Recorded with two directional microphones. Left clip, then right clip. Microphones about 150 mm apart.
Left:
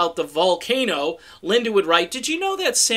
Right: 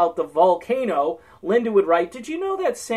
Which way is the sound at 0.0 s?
25° left (ahead or behind).